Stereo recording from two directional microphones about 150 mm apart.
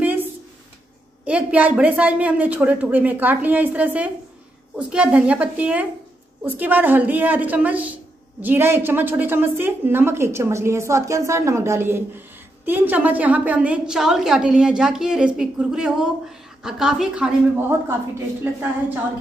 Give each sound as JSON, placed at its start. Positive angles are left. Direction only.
{"t": 1.2, "sound": "a woman's voice", "side_deg": -10}